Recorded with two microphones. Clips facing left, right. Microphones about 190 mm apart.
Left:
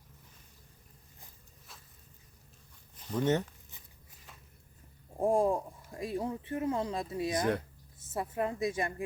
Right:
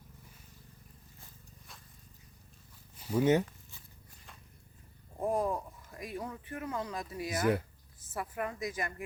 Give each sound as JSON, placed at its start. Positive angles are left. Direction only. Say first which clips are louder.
{"t": 3.0, "sound": "speech", "louder": "right 3 dB", "side_deg": -10}
{"t": 5.2, "sound": "speech", "louder": "left 4 dB", "side_deg": 30}